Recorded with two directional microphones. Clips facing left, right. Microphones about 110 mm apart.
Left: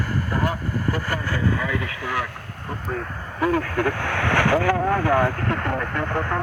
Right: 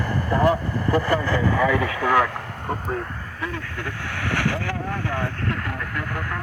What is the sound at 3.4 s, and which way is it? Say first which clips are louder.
Speech: left 11 dB; 50° left (ahead or behind).